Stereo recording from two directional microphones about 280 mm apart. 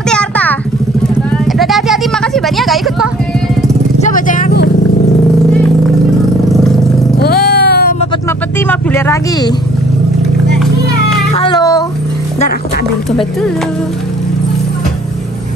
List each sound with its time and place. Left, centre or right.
0.1 s a sound: centre
1.6 s a sound: centre
4.0 s vehicle: left
7.2 s vehicle: left
8.6 s vehicle: centre
11.3 s cat: centre